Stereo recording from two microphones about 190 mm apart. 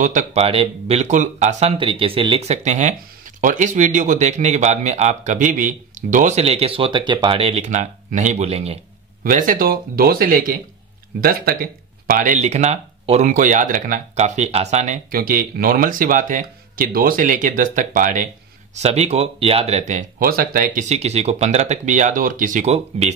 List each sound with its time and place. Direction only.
0.0 s speech: 40° right (ahead or behind)
9.2 s speech: 45° right (ahead or behind)
15.0 s speech: 50° right (ahead or behind)